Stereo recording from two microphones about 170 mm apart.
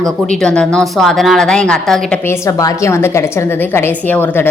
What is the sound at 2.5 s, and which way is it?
Speech, 20° left (ahead or behind).